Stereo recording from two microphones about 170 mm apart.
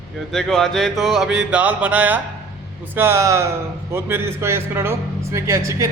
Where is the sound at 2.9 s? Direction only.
15° right (ahead or behind).